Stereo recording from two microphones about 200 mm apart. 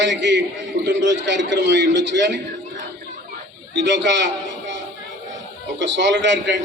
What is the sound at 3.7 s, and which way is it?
A man's voice, 60° right (ahead or behind).